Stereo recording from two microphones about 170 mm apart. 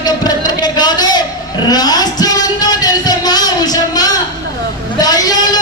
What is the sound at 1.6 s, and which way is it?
Music, 25° left (ahead or behind).